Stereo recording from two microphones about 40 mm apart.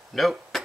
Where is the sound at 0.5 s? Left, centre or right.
Centre.